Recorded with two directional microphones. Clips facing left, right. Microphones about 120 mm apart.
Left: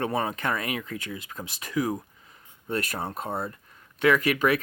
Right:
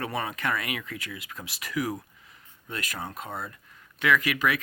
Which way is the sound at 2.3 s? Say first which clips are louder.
Left 9 dB; 35° left (ahead or behind).